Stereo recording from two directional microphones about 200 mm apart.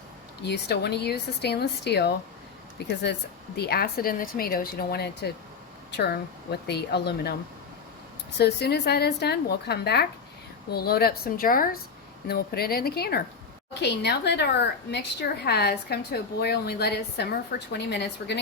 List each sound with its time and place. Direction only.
0.4 s a woman's voice: 55° left (ahead or behind)
8.4 s a woman's voice: 55° left (ahead or behind)